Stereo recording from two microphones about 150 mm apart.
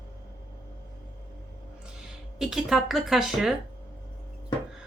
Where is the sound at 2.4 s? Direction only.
Centre (ahead or behind).